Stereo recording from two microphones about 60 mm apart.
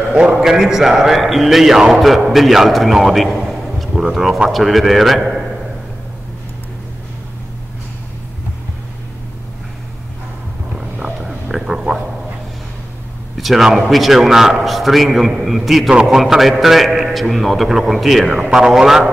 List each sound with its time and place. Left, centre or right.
0.1 s a man's voice: centre
11.2 s a sound: centre
13.4 s a man's voice: centre